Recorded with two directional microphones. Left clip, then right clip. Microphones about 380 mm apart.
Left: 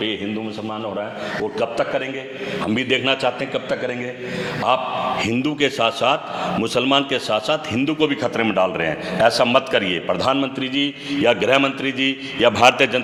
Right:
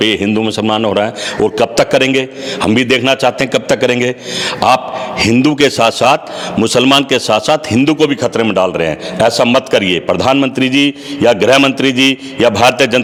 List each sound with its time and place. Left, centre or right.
0.3 s a man's voice: right
1.5 s a man's voice: right
2.9 s a man's voice: right
4.6 s a man's voice: right
5.2 s a man's voice: right
11.2 s a man's voice: right
11.5 s a man's voice: right
12.4 s a man's voice: right